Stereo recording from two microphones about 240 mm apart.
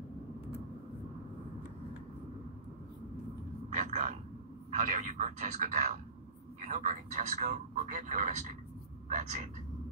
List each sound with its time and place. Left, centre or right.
3.7 s speech: right